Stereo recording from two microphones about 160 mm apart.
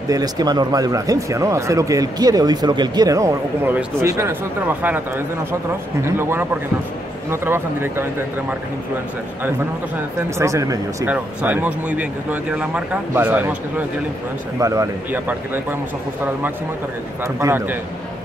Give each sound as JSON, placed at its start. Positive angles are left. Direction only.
{"t": 0.1, "sound": "speech", "side_deg": -25}
{"t": 9.9, "sound": "speech", "side_deg": -20}
{"t": 17.2, "sound": "speech", "side_deg": -15}